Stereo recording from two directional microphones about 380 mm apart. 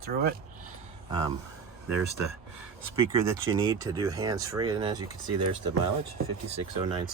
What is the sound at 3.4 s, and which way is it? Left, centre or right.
Speech, centre.